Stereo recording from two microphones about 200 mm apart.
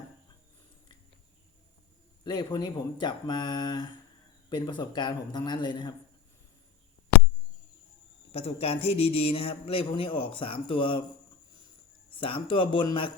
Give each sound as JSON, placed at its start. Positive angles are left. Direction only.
{"t": 2.2, "sound": "a man's voice", "side_deg": 20}
{"t": 8.3, "sound": "a man's voice", "side_deg": 30}
{"t": 12.1, "sound": "a man's voice", "side_deg": 25}